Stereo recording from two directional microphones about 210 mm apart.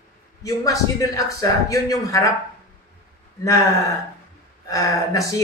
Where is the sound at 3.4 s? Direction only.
15° left (ahead or behind).